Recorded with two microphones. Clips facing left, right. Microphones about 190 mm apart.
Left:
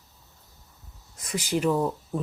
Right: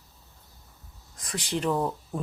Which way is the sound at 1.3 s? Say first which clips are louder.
Left 3 dB; 5° left (ahead or behind).